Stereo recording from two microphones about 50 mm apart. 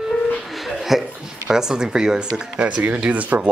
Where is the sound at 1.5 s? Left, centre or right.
Centre; by 3.4 s right.